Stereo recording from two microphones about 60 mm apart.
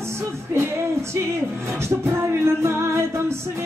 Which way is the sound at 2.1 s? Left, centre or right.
Right.